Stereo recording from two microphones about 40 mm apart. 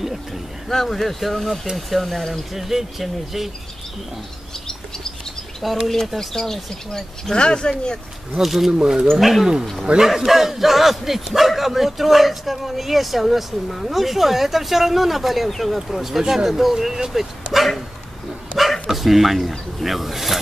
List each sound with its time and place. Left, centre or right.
0.7 s speech: centre
2.5 s speech: centre
5.7 s speech: centre
6.1 s speech: centre
8.4 s speech: centre